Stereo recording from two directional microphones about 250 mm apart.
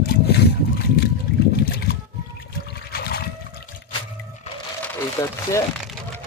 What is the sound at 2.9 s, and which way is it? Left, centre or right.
Boat, left.